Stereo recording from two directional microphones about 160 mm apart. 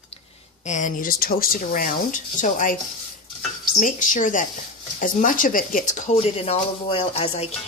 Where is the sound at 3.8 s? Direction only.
55° left (ahead or behind).